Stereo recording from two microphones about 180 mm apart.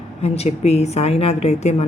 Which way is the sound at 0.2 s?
35° left (ahead or behind).